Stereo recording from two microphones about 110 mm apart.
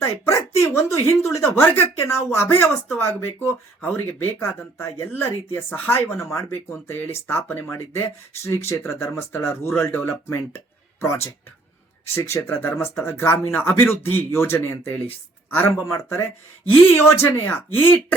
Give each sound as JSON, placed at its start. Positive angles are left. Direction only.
{"t": 0.6, "sound": "speech", "side_deg": 25}
{"t": 16.9, "sound": "speech", "side_deg": 20}